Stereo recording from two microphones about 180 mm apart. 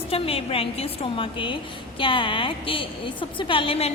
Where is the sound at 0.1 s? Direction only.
30° left (ahead or behind).